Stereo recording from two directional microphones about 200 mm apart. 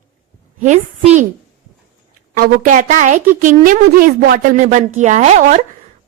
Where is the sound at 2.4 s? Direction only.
40° right (ahead or behind).